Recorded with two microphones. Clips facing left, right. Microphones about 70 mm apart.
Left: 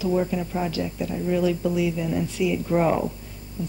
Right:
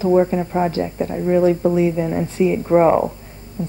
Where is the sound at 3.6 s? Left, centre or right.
Right.